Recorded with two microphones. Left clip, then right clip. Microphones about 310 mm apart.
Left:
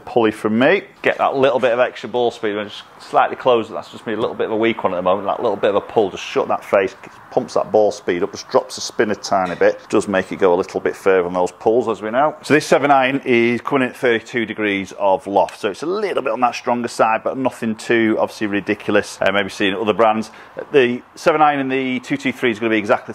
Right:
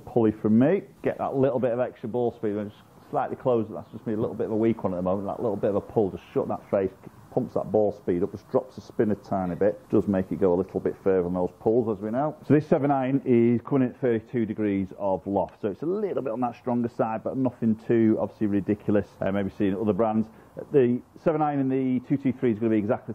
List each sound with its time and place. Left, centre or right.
0.2 s speech: centre
7.9 s speech: centre
11.4 s speech: left
11.9 s speech: centre
15.0 s speech: left
15.4 s speech: centre